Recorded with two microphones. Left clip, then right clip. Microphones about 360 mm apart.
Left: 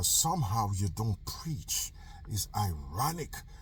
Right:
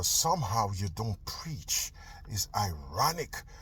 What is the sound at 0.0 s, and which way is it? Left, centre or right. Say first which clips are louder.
Speech: right 2 dB; centre.